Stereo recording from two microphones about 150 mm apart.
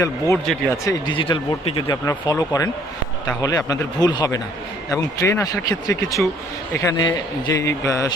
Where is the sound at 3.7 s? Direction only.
25° left (ahead or behind).